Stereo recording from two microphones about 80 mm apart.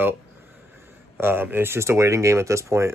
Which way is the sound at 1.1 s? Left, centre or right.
Right.